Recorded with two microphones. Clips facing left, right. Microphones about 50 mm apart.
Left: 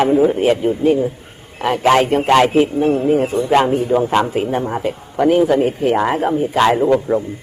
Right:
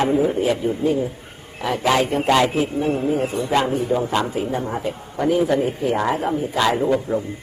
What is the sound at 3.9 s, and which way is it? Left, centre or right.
Speech, left.